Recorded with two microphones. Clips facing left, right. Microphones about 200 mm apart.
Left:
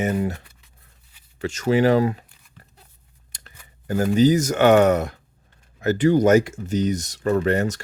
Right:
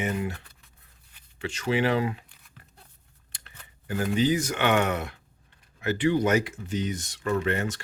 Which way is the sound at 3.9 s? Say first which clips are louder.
Left 7 dB; 40° left (ahead or behind).